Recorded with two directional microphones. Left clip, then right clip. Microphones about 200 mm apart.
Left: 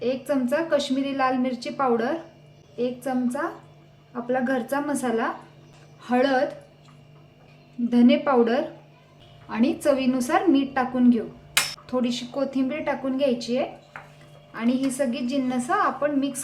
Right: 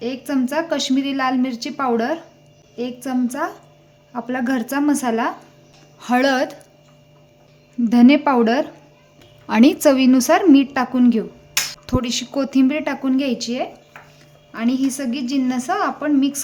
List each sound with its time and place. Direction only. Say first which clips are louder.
0.0 s a woman's voice: right 2 dB; 45° right (ahead or behind)
7.9 s a woman's voice: right 6 dB; 50° right (ahead or behind)
9.5 s a woman's voice: right 8 dB; 60° right (ahead or behind); by 16.4 s 40° right (ahead or behind)